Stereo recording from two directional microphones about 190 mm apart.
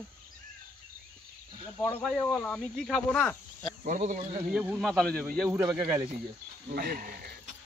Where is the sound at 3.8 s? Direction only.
40° right (ahead or behind).